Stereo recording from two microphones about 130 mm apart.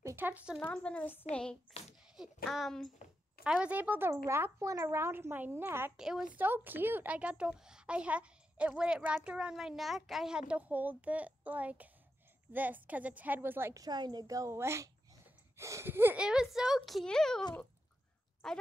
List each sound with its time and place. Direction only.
0.0 s a sound: 15° right (ahead or behind)
0.6 s a woman's voice: 10° left (ahead or behind)
3.4 s speech: 10° right (ahead or behind)
5.9 s speech: 5° right (ahead or behind)
6.3 s speech: 15° right (ahead or behind)
13.8 s a child's voice: 30° right (ahead or behind); by 17.4 s 5° left (ahead or behind)
18.4 s speech: 5° left (ahead or behind)